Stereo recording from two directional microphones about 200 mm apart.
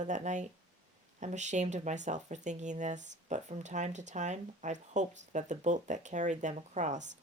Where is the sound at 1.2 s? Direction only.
35° right (ahead or behind).